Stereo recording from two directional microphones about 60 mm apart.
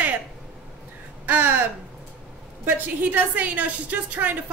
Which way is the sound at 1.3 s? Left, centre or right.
Right.